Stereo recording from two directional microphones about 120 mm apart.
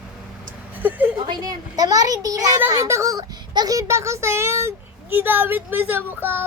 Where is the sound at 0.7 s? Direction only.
15° right (ahead or behind).